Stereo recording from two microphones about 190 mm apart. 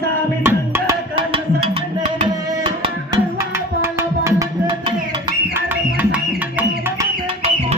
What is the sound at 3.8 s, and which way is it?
Music, 15° right (ahead or behind).